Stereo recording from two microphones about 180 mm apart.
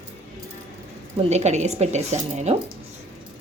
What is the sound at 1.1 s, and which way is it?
Speech, 40° right (ahead or behind).